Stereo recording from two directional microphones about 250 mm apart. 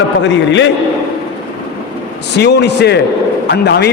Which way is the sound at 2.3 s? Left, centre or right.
Left.